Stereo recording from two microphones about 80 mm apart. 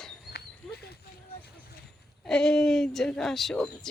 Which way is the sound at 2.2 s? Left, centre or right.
Centre.